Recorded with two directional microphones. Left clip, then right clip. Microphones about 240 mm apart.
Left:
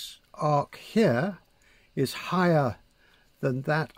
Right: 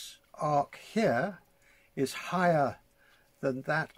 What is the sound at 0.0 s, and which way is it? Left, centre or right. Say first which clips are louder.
Speech: left 4 dB; left.